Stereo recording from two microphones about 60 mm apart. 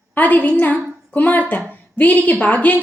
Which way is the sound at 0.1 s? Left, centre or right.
Left.